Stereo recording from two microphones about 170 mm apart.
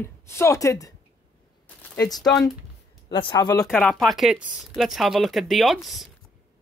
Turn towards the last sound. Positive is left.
turn(degrees=0)  # may be behind; listen again after turning